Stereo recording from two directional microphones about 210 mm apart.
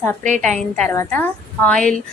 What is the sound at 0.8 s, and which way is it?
A woman's voice, 10° left (ahead or behind).